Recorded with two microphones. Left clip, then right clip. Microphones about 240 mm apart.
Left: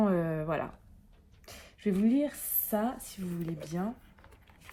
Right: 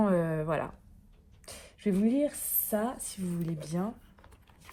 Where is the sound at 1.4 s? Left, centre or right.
Right.